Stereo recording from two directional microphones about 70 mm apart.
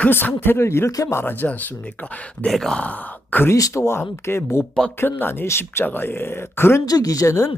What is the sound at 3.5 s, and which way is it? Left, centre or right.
Speech, left.